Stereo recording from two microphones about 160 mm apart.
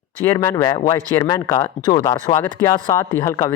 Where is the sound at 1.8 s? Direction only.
20° left (ahead or behind).